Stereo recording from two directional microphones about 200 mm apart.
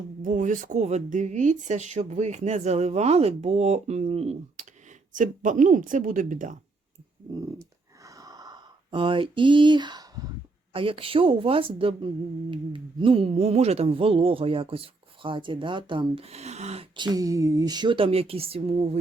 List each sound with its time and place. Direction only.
0.2 s speech: 40° right (ahead or behind)
8.0 s a sound: 15° right (ahead or behind)
10.7 s a woman's voice: 25° right (ahead or behind)